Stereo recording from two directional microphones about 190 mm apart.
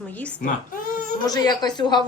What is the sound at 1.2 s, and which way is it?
Speech, 20° left (ahead or behind).